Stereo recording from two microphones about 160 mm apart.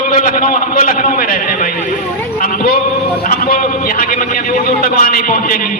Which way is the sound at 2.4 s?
65° left (ahead or behind).